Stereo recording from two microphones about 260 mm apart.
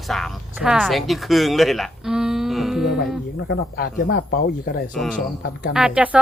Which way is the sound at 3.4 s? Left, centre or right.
Left.